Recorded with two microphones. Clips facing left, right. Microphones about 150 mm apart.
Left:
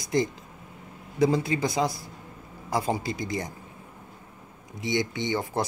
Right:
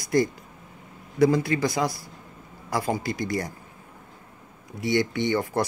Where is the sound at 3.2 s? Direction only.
20° left (ahead or behind).